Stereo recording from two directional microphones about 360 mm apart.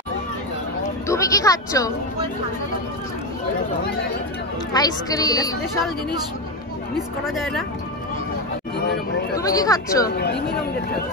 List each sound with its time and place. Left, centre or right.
1.0 s a woman's voice: centre
4.7 s a woman's voice: centre
7.0 s speech: centre
8.8 s speech: left
9.4 s a woman's voice: centre
10.0 s speech: left